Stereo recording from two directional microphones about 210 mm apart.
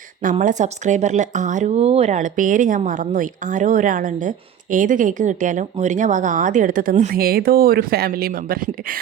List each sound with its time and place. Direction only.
0.2 s speech: 40° right (ahead or behind)